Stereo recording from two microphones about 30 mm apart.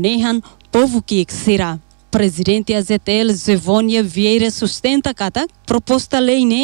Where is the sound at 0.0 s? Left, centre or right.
Left.